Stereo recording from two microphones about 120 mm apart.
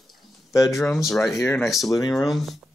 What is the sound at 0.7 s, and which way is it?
Speech, centre (ahead or behind).